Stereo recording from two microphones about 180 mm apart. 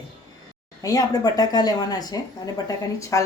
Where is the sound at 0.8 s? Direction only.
20° left (ahead or behind).